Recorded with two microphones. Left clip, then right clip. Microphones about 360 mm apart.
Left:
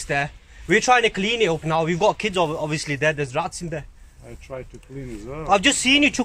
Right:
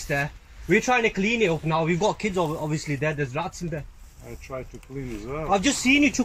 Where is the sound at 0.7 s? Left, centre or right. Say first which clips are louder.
Left 4 dB; centre.